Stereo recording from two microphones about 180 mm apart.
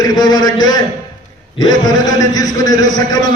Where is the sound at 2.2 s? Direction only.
20° left (ahead or behind).